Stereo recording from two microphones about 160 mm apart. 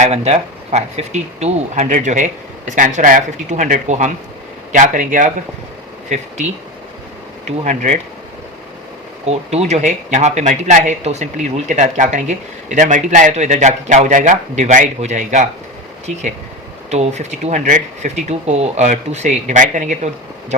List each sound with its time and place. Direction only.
0.0 s speech: 45° right (ahead or behind)
7.4 s speech: 45° right (ahead or behind)
9.2 s speech: 40° right (ahead or behind)
16.9 s speech: 45° right (ahead or behind)